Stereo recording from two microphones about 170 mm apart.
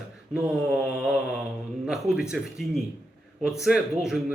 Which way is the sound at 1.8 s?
5° right (ahead or behind).